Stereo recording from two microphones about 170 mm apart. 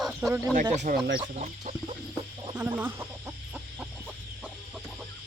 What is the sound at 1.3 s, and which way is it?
Chicken, 40° right (ahead or behind).